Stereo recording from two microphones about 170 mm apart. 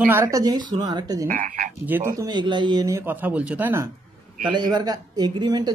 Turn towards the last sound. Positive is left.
turn(degrees=-25)  # may be behind; listen again after turning